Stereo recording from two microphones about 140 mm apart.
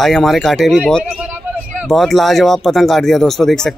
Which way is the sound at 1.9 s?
Centre (ahead or behind).